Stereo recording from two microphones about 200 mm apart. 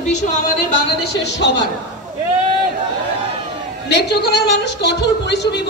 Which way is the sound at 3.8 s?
60° left (ahead or behind).